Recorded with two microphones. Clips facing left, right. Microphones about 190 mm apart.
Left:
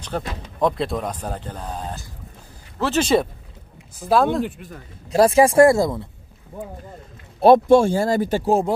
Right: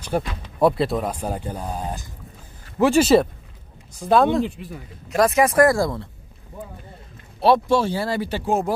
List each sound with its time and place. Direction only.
0.1 s speech: 15° right (ahead or behind)
5.1 s speech: 30° left (ahead or behind)
7.3 s speech: 50° left (ahead or behind)